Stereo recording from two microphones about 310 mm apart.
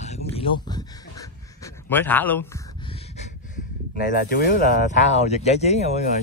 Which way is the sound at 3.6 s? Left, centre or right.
Left.